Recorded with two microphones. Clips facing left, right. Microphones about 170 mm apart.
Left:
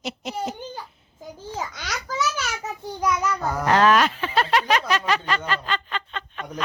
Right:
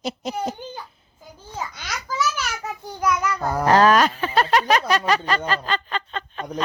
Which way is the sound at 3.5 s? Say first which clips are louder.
Right 3 dB; 35° right (ahead or behind).